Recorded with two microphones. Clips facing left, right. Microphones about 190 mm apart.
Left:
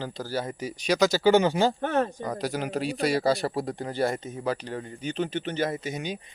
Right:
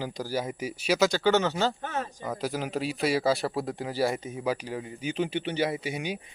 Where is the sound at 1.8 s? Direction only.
60° left (ahead or behind).